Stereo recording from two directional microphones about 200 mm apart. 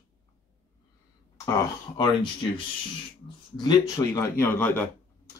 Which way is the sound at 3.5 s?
20° left (ahead or behind).